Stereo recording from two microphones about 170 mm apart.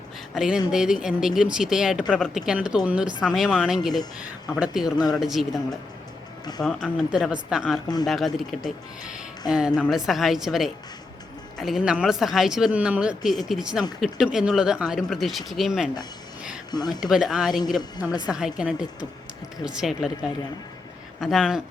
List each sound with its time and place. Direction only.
0.3 s speech: 5° right (ahead or behind)
6.6 s speech: 5° left (ahead or behind)
16.7 s speech: 25° left (ahead or behind)
17.0 s speech: centre (ahead or behind)